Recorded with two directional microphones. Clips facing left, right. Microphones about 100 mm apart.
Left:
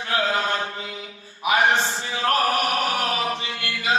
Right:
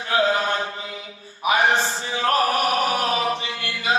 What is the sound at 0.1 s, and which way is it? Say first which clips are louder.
Mantra: right 3 dB; 30° right (ahead or behind).